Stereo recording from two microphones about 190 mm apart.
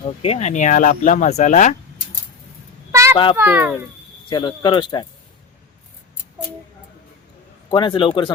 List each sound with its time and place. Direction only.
0.2 s speech: 35° left (ahead or behind)
2.9 s a sound: 15° right (ahead or behind)
3.3 s a child's voice: 10° right (ahead or behind)
4.3 s speech: 25° left (ahead or behind)
7.7 s speech: 25° left (ahead or behind)